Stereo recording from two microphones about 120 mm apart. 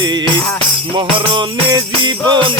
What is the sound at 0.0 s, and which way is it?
Music, 40° right (ahead or behind).